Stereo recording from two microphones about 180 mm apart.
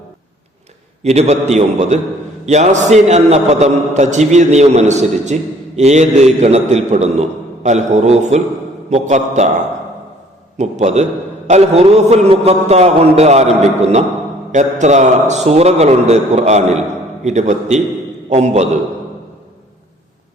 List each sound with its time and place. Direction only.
1.0 s a man's voice: 35° right (ahead or behind)
10.6 s a man's voice: 40° right (ahead or behind)